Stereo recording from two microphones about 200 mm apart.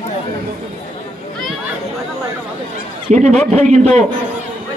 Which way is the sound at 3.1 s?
35° right (ahead or behind).